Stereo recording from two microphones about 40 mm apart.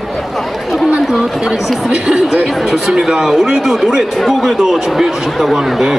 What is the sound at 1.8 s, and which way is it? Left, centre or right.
A man's voice, centre.